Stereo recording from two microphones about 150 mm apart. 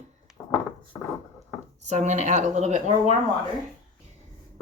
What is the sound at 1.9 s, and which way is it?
Speech, 50° right (ahead or behind).